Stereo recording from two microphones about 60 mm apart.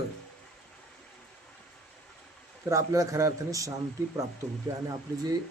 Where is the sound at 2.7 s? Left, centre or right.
Right.